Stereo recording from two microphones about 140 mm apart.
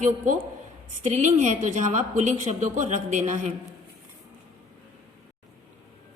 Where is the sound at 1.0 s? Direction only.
55° right (ahead or behind).